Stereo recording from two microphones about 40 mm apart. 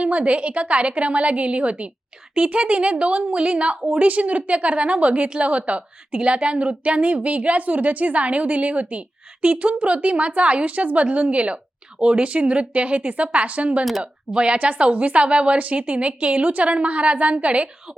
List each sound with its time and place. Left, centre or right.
0.0 s a woman's voice: right
3.2 s a woman's voice: right